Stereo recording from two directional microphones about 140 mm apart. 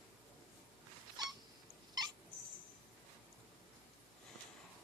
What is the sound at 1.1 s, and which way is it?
Cat, 30° right (ahead or behind).